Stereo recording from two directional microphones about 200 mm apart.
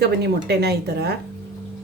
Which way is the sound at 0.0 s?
55° right (ahead or behind).